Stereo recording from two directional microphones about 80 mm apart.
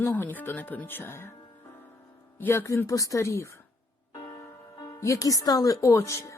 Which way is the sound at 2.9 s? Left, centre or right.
Left.